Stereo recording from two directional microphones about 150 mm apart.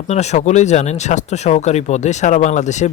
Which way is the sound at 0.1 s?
50° left (ahead or behind).